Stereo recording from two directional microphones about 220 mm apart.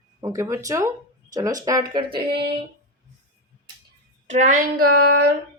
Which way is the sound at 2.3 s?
45° right (ahead or behind).